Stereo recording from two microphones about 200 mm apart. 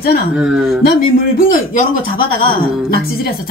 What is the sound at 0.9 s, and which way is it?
Speech, 45° left (ahead or behind).